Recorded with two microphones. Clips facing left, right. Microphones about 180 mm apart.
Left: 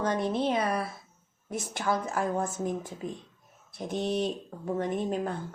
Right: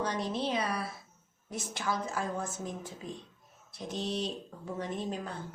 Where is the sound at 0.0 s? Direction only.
50° left (ahead or behind).